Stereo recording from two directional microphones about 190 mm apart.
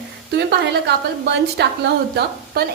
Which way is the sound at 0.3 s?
60° right (ahead or behind).